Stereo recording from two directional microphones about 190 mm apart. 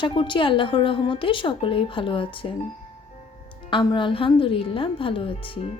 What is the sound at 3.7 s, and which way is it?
A woman's voice, 25° left (ahead or behind).